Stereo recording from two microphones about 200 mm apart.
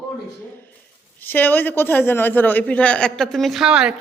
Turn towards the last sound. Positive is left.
turn(degrees=-5)  # may be behind; listen again after turning